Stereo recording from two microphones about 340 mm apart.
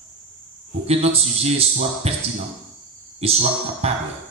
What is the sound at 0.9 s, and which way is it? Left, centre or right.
A man's voice, centre.